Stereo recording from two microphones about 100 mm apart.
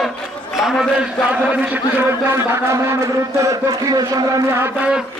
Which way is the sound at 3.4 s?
40° right (ahead or behind).